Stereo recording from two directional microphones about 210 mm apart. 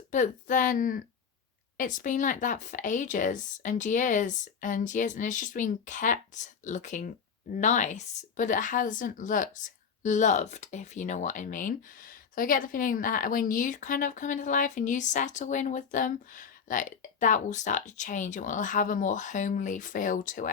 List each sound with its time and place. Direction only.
0.1 s speech: 40° left (ahead or behind)